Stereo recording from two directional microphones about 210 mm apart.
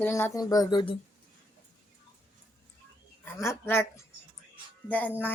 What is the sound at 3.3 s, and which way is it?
Speech, 10° left (ahead or behind).